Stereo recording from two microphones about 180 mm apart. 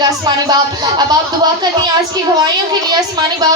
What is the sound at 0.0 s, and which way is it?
A woman's voice, 20° right (ahead or behind).